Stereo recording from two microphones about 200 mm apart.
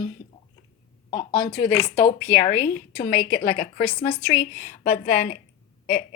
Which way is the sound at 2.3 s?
35° left (ahead or behind).